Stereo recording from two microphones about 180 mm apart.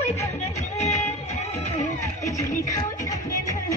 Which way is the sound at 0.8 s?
35° left (ahead or behind).